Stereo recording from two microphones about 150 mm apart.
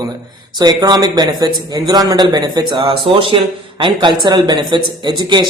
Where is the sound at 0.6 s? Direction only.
25° right (ahead or behind).